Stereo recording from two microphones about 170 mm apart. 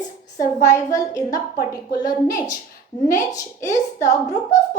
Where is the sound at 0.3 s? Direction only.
20° left (ahead or behind).